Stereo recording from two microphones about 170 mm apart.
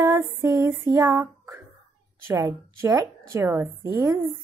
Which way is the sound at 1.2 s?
15° right (ahead or behind).